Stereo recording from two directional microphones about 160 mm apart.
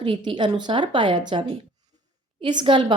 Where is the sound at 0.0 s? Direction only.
30° right (ahead or behind).